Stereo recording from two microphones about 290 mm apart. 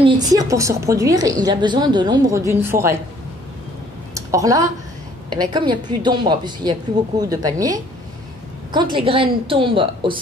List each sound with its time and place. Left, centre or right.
0.0 s a woman's voice: centre
4.1 s a sound: centre
5.3 s a woman's voice: centre
8.9 s a woman's voice: centre